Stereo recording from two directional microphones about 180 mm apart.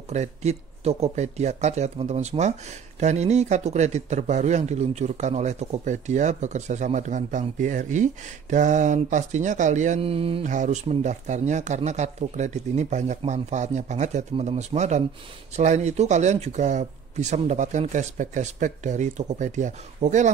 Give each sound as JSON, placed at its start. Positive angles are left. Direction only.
{"t": 0.1, "sound": "a man's voice", "side_deg": -40}